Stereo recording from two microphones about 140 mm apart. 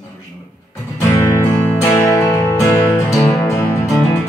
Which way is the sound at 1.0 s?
15° left (ahead or behind).